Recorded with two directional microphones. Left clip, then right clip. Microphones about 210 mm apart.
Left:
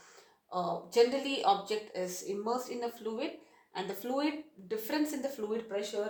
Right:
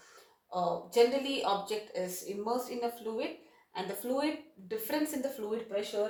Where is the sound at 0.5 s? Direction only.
35° left (ahead or behind).